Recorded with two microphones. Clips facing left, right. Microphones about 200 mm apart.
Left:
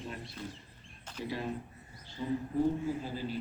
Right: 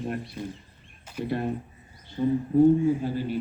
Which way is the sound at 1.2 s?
55° right (ahead or behind).